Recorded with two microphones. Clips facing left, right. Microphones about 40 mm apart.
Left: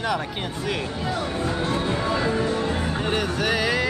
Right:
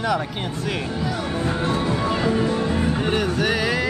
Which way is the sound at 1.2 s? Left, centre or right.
Right.